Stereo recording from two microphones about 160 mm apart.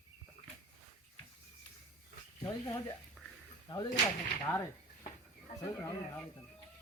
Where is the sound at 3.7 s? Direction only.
30° left (ahead or behind).